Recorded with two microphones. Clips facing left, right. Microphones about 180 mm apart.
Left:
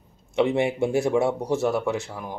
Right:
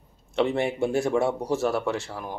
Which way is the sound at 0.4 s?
10° left (ahead or behind).